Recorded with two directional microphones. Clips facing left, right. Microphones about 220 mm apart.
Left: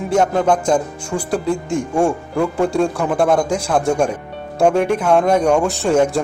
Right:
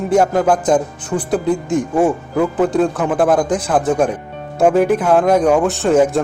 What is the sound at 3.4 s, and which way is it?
Speech, 10° left (ahead or behind).